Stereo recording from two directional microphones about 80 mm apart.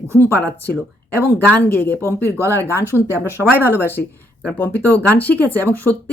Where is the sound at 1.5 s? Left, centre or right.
Left.